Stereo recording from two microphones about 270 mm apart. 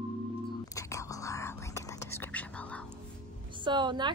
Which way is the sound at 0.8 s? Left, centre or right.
Centre.